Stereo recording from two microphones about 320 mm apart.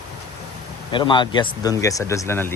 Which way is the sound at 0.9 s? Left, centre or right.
Centre.